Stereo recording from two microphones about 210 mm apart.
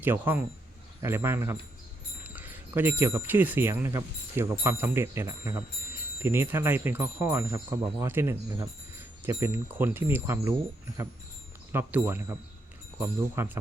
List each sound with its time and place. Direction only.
0.0 s speech: 10° right (ahead or behind)
11.7 s speech: 10° right (ahead or behind)